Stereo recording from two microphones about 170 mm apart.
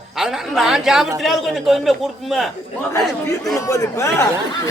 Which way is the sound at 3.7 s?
20° left (ahead or behind).